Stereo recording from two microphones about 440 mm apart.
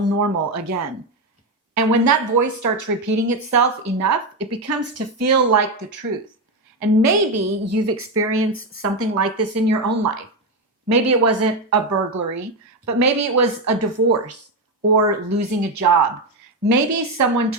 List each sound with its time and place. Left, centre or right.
0.2 s a woman's voice: right
7.0 s a woman's voice: right